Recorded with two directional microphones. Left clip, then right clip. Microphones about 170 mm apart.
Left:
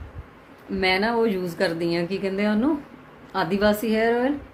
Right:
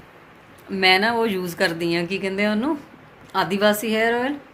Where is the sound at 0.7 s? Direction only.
Centre (ahead or behind).